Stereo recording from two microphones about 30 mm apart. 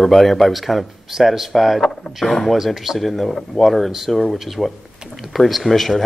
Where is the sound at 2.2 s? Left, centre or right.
Left.